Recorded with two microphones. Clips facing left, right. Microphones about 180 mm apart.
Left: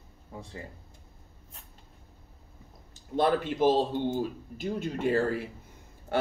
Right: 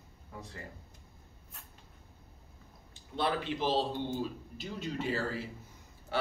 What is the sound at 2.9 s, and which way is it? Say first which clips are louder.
Speech: left 7 dB; 45° left (ahead or behind).